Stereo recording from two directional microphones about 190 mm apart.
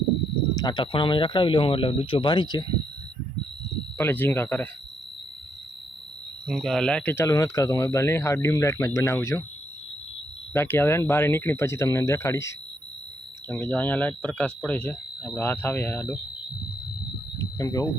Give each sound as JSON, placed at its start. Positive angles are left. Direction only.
{"t": 0.5, "sound": "speech", "side_deg": 20}
{"t": 3.9, "sound": "speech", "side_deg": 10}
{"t": 6.5, "sound": "speech", "side_deg": 0}
{"t": 10.5, "sound": "speech", "side_deg": 10}
{"t": 17.6, "sound": "speech", "side_deg": 20}